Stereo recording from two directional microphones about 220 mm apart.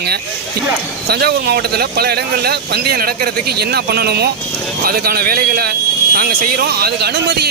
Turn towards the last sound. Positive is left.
turn(degrees=-50)  # may be behind; listen again after turning